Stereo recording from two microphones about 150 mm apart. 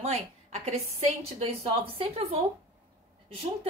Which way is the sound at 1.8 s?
40° right (ahead or behind).